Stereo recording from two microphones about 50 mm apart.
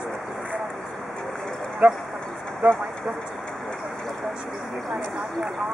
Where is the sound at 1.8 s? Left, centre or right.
Right.